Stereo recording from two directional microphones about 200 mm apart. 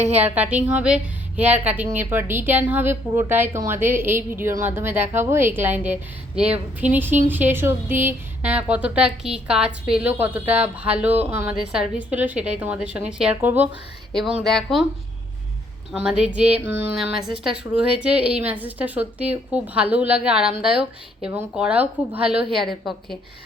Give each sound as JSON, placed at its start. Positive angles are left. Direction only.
{"t": 0.0, "sound": "a woman's voice", "side_deg": -30}
{"t": 0.3, "sound": "a woman's voice", "side_deg": -5}
{"t": 15.9, "sound": "a woman's voice", "side_deg": -5}